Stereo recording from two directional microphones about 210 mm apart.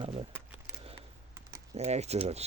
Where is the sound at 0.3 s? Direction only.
10° right (ahead or behind).